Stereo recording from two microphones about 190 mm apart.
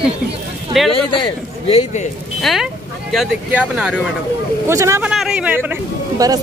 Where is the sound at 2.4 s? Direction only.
Centre (ahead or behind).